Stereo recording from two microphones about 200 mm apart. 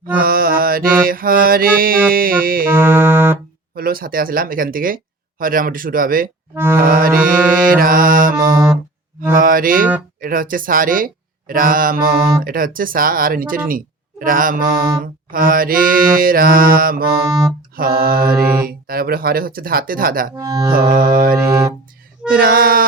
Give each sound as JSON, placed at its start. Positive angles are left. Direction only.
{"t": 0.2, "sound": "mantra", "side_deg": -45}
{"t": 1.0, "sound": "speech", "side_deg": -45}
{"t": 2.6, "sound": "music", "side_deg": -10}
{"t": 3.8, "sound": "speech", "side_deg": -45}
{"t": 6.6, "sound": "music", "side_deg": -10}
{"t": 6.8, "sound": "speech", "side_deg": -45}
{"t": 7.3, "sound": "music", "side_deg": -5}
{"t": 7.7, "sound": "speech", "side_deg": -45}
{"t": 20.3, "sound": "music", "side_deg": -20}
{"t": 21.0, "sound": "speech", "side_deg": -45}
{"t": 21.3, "sound": "music", "side_deg": -15}
{"t": 22.4, "sound": "speech", "side_deg": -45}